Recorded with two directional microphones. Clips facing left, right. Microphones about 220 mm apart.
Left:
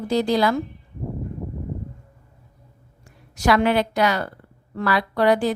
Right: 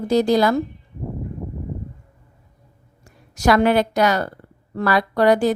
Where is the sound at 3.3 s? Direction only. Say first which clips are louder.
Right 3 dB; 45° right (ahead or behind).